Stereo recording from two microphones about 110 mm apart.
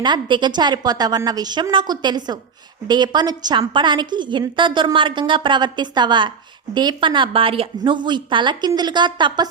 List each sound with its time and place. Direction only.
0.0 s a woman's voice: 45° right (ahead or behind)
7.8 s a woman's voice: 45° right (ahead or behind)